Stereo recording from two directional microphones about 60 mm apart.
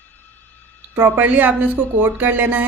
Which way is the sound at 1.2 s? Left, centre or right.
Right.